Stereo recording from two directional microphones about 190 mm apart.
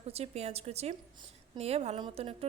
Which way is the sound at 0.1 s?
35° right (ahead or behind).